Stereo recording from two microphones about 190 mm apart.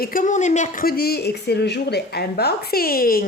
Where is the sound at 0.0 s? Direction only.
45° left (ahead or behind).